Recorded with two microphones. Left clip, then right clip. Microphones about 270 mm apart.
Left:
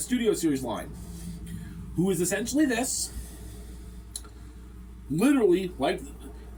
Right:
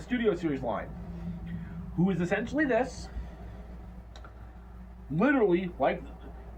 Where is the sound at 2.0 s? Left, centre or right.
Centre.